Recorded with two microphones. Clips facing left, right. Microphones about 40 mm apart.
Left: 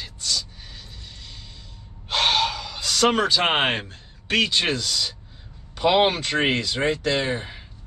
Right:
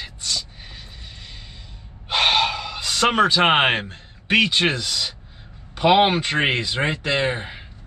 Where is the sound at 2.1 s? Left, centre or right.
Right.